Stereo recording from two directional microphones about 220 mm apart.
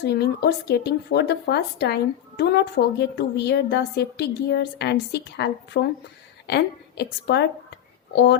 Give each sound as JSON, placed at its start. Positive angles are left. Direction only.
{"t": 0.0, "sound": "speech", "side_deg": 50}